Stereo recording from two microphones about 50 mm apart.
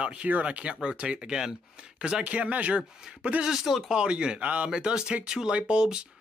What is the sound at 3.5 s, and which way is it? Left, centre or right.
Speech, centre.